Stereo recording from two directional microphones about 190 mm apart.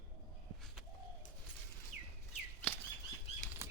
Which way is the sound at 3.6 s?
15° right (ahead or behind).